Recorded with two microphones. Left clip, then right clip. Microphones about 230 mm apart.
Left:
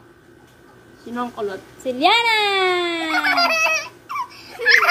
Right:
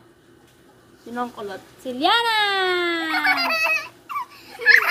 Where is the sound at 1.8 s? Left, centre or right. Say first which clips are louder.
Left 3 dB; right.